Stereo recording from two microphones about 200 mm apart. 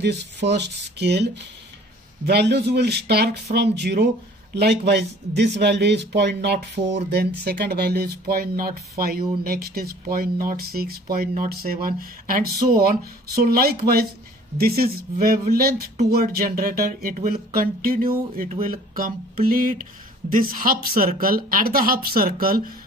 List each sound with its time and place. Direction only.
0.0 s speech: 60° right (ahead or behind)